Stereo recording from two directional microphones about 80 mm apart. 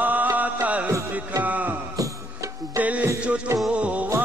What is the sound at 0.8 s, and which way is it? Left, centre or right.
Music, right.